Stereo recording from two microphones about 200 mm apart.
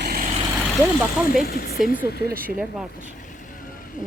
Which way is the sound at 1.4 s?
50° left (ahead or behind).